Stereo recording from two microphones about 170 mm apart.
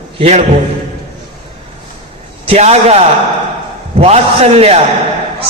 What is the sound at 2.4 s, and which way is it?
A man's voice, 40° right (ahead or behind).